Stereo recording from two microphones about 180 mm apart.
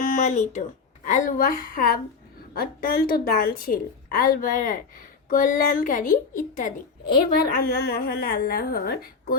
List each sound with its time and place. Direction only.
0.0 s a woman's voice: 45° left (ahead or behind)